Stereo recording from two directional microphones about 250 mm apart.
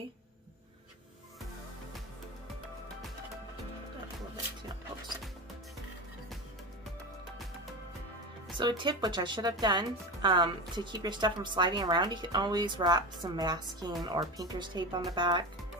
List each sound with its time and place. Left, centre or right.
8.5 s speech: centre